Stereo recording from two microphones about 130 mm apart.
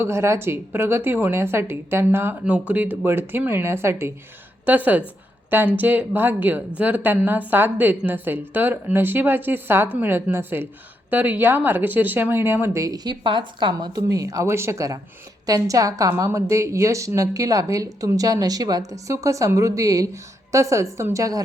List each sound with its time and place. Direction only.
0.0 s speech: 20° right (ahead or behind)